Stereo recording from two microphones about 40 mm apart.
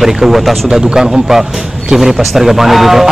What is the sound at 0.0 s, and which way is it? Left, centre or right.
A man's voice, centre.